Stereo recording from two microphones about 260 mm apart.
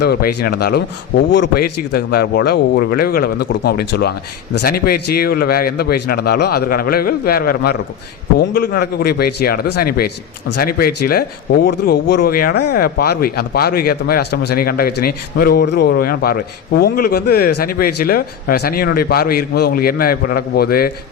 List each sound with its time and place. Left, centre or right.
0.0 s speech: left